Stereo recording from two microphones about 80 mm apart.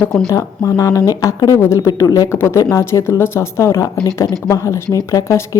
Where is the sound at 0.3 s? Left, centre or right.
Left.